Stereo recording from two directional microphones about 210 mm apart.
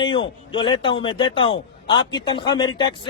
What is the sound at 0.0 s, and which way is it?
A man's voice, 25° left (ahead or behind).